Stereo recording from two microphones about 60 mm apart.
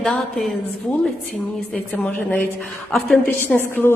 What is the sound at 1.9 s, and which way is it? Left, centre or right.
Speech, left.